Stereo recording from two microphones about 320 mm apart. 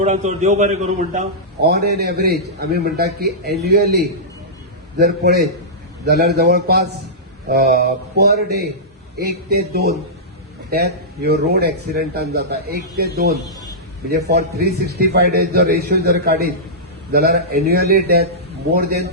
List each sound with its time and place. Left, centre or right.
0.0 s a man's voice: right